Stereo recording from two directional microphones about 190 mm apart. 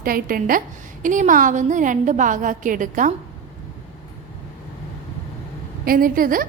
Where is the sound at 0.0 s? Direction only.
50° right (ahead or behind).